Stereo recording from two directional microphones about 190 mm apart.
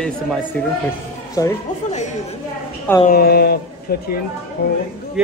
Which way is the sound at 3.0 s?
55° left (ahead or behind).